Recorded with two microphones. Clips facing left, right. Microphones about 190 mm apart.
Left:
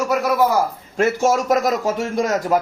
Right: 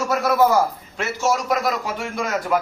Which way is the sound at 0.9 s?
50° left (ahead or behind).